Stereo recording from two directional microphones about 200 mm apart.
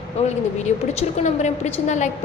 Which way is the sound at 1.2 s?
35° left (ahead or behind).